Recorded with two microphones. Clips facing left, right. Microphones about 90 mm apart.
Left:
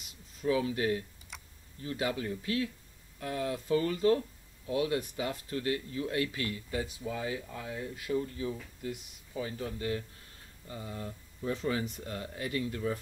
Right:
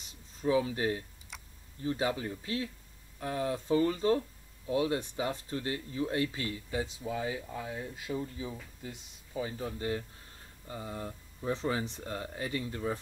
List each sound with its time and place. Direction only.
0.0 s a sound: 30° right (ahead or behind)
1.3 s computer keyboard: centre (ahead or behind)
1.8 s speech: 25° right (ahead or behind)